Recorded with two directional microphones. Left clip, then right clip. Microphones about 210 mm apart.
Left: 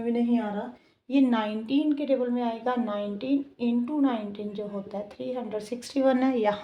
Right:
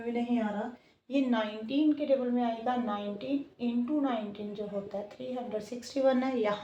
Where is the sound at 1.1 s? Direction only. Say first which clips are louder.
Left 5 dB; 50° left (ahead or behind).